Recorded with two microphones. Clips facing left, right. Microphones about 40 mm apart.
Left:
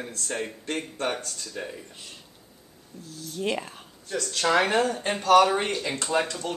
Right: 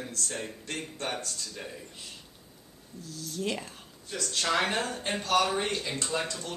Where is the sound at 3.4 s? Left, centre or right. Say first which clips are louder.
Left 5 dB; left.